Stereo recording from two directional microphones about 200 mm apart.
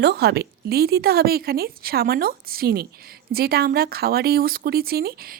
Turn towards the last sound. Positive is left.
turn(degrees=-50)  # may be behind; listen again after turning